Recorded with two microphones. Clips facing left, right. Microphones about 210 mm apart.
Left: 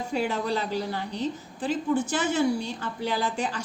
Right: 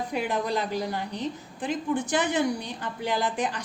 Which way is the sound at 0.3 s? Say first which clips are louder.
Even; 15° right (ahead or behind).